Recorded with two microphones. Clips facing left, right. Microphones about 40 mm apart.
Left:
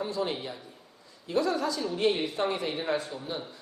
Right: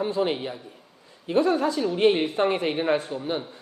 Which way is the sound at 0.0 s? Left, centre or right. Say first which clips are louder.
Right 6 dB; right.